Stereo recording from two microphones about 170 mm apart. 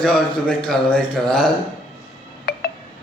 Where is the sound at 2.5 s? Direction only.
70° left (ahead or behind).